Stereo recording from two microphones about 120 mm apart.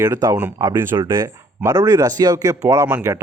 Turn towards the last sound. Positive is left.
turn(degrees=-20)  # may be behind; listen again after turning